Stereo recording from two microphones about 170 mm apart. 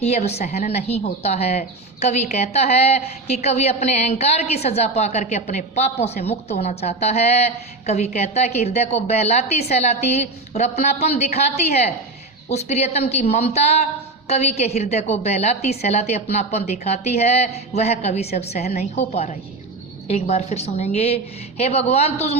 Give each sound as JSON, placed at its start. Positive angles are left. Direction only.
{"t": 0.0, "sound": "a woman's voice", "side_deg": 40}